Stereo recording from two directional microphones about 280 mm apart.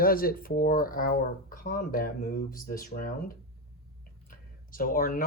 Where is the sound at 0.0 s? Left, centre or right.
Left.